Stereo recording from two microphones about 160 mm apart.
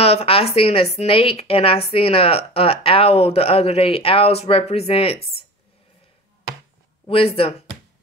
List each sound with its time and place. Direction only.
0.0 s speech: 40° left (ahead or behind)
7.1 s speech: 35° left (ahead or behind)